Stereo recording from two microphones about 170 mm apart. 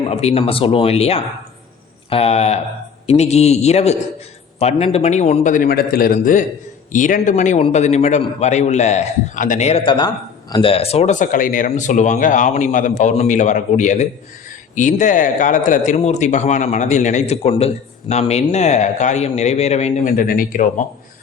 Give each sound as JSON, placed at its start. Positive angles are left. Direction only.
{"t": 0.0, "sound": "a man's voice", "side_deg": 35}
{"t": 20.1, "sound": "speech", "side_deg": 60}